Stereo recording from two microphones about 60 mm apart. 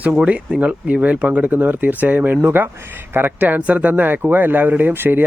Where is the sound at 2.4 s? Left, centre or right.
Right.